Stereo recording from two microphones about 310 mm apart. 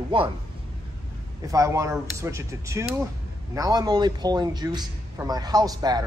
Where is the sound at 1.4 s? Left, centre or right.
Centre.